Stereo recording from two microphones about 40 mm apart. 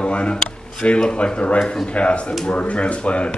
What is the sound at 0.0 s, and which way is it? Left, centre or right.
A man's voice, left.